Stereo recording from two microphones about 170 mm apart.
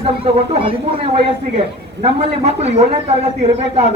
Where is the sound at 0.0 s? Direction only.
35° right (ahead or behind).